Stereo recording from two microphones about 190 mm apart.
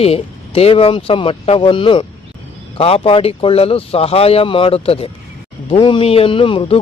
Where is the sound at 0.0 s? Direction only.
30° left (ahead or behind).